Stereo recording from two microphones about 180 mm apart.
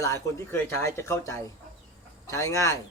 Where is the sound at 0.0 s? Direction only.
15° left (ahead or behind).